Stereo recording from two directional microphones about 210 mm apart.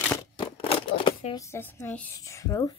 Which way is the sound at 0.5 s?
25° left (ahead or behind).